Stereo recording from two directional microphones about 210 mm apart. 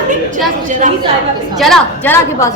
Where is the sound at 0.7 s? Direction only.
35° right (ahead or behind).